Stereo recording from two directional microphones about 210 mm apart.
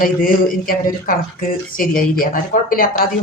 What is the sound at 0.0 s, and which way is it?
Speech, 40° left (ahead or behind).